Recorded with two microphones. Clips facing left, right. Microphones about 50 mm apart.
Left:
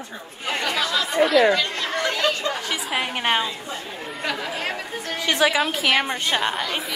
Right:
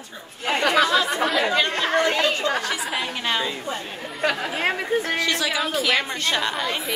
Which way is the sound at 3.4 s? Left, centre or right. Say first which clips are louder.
Right 2 dB; right.